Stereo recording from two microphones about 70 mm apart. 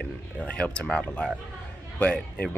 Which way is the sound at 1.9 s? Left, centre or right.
Left.